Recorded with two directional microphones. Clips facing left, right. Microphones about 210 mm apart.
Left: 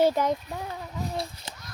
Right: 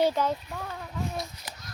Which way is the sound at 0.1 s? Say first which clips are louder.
Left 2 dB; 15° left (ahead or behind).